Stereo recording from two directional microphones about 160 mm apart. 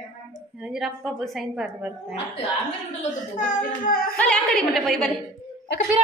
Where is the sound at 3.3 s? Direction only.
55° left (ahead or behind).